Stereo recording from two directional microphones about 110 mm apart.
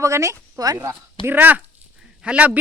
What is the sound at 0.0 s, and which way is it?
Speech, 30° right (ahead or behind).